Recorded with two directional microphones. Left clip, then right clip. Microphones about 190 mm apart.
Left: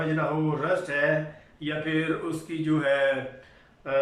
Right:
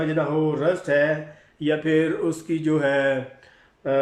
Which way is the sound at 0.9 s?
40° right (ahead or behind).